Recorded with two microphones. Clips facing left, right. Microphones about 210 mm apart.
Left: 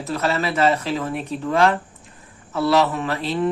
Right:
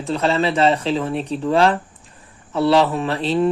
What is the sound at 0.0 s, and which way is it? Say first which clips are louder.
Speech: right 4 dB; 30° right (ahead or behind).